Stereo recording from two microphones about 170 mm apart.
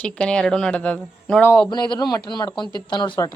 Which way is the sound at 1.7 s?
25° left (ahead or behind).